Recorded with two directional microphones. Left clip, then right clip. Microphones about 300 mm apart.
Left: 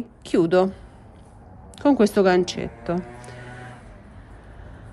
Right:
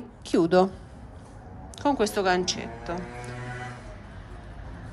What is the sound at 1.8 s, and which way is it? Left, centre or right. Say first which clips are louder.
A man's voice: left 6 dB; left.